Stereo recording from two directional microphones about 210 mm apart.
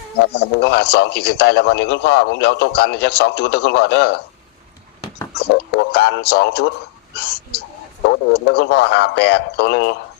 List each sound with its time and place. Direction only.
0.3 s a man's voice: 50° left (ahead or behind)
5.7 s a man's voice: 50° left (ahead or behind)